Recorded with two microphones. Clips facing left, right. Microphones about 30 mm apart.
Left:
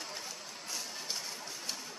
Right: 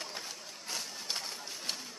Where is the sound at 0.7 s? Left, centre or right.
Right.